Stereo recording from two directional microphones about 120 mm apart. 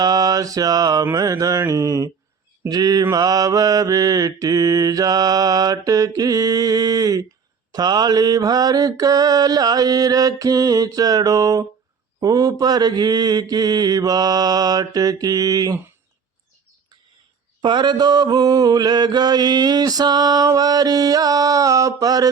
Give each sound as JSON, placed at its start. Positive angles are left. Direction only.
{"t": 0.0, "sound": "mantra", "side_deg": -30}
{"t": 17.6, "sound": "mantra", "side_deg": -40}